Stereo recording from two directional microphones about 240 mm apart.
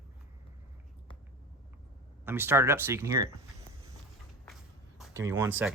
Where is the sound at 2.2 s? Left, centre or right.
Centre.